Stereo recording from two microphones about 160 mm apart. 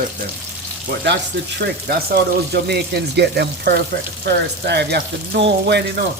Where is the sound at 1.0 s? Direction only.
90° right.